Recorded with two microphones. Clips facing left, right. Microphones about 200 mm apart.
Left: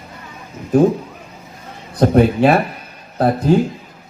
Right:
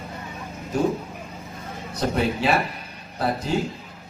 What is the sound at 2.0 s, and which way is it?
A man's voice, 55° left (ahead or behind).